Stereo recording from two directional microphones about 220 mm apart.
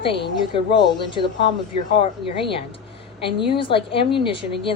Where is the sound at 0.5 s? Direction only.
20° left (ahead or behind).